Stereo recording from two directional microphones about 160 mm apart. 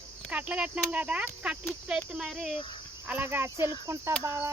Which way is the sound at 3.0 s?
10° right (ahead or behind).